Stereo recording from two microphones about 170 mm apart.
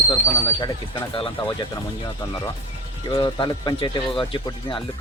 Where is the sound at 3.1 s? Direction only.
25° left (ahead or behind).